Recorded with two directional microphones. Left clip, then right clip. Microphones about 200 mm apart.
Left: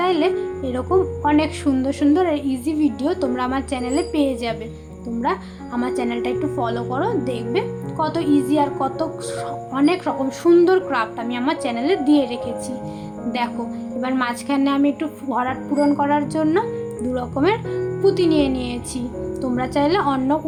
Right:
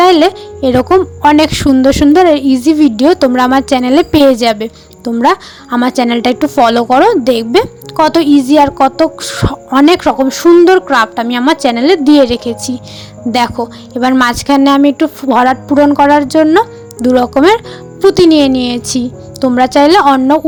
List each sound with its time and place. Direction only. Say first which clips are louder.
0.0 s speech: right 12 dB; 50° right (ahead or behind)